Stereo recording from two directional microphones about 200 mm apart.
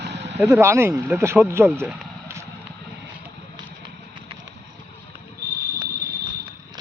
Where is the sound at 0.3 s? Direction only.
15° right (ahead or behind).